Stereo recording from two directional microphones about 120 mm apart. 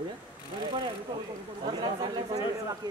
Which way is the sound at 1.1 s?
35° right (ahead or behind).